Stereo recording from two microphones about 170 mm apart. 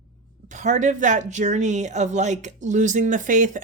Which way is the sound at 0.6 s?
45° right (ahead or behind).